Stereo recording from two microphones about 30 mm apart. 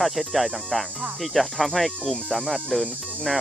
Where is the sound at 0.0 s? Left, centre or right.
Centre.